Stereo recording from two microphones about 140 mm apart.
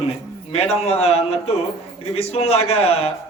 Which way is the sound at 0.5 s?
50° left (ahead or behind).